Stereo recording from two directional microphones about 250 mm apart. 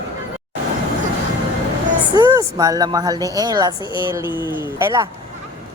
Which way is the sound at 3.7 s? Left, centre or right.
Centre.